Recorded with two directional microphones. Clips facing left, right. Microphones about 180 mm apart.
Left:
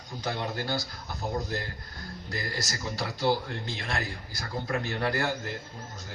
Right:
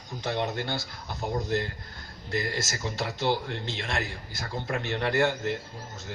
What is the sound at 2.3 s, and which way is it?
Speech, 25° right (ahead or behind).